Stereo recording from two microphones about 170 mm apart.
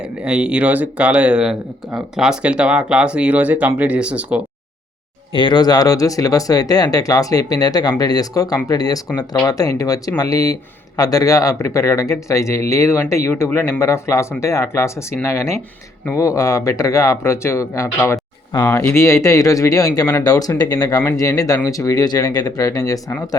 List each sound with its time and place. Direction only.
0.0 s speech: 5° right (ahead or behind)
5.3 s speech: 30° left (ahead or behind)